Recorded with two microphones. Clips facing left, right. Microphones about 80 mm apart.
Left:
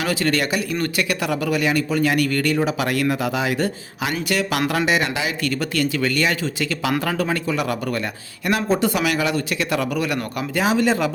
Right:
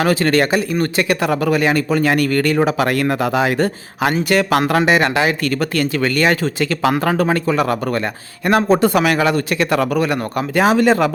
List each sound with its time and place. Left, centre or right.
0.0 s speech: right